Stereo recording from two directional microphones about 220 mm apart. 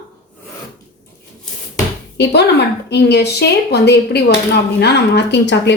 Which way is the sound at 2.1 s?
50° left (ahead or behind).